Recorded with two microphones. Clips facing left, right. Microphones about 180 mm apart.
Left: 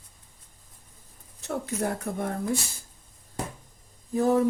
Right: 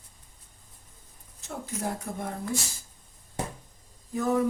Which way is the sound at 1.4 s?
65° left (ahead or behind).